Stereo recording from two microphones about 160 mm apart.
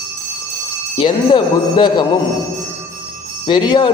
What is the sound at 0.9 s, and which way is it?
Mantra, 30° left (ahead or behind).